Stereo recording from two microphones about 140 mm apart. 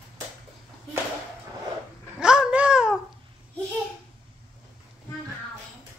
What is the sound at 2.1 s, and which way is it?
Babbling, 5° right (ahead or behind).